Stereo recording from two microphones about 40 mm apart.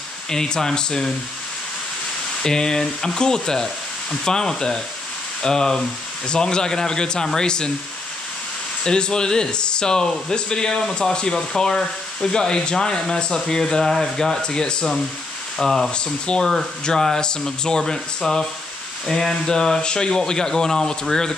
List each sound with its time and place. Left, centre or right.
0.3 s speech: centre
2.4 s speech: centre
8.8 s speech: centre
14.4 s speech: left
15.5 s speech: centre
15.9 s speech: left